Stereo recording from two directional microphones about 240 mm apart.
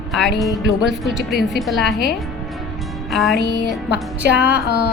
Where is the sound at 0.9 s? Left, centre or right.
Centre.